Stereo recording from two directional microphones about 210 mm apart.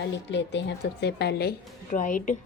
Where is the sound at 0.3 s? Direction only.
55° left (ahead or behind).